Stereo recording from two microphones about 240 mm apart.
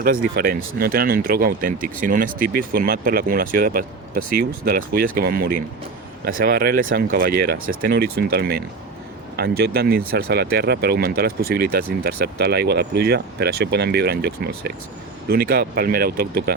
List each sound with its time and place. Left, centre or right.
0.0 s speech: right